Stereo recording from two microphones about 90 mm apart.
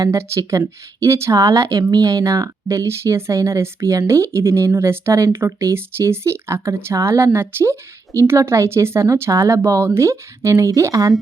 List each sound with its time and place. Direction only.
0.0 s speech: 30° right (ahead or behind)